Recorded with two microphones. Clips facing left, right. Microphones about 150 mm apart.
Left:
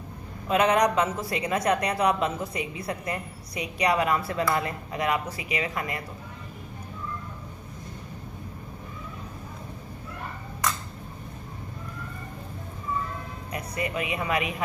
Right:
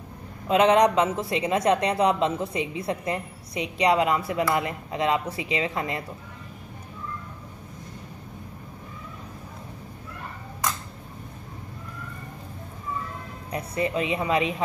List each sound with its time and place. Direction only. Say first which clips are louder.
0.5 s a woman's voice: right 3 dB; 25° right (ahead or behind)
13.5 s a woman's voice: right 4 dB; 30° right (ahead or behind)